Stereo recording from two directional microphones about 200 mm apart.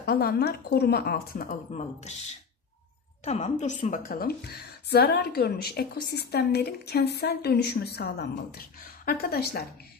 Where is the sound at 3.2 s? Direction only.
35° left (ahead or behind).